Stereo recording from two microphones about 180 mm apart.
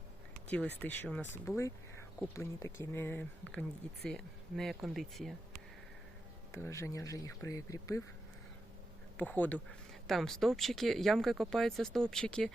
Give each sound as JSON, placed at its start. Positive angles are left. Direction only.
{"t": 0.4, "sound": "speech", "side_deg": 5}
{"t": 6.5, "sound": "speech", "side_deg": 15}
{"t": 9.1, "sound": "speech", "side_deg": 10}